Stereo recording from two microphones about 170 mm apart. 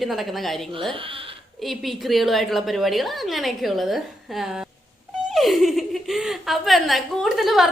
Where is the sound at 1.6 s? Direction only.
Centre (ahead or behind).